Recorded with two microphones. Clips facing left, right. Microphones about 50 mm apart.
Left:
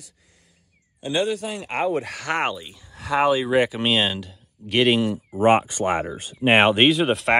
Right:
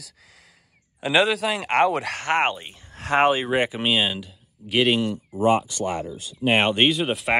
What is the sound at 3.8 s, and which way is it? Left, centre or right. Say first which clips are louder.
Speech: left 1 dB; centre.